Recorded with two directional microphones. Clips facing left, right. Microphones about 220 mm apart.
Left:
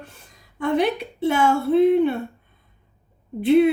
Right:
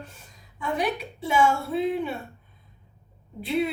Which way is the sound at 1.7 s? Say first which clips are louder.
Left 10 dB; 55° left (ahead or behind).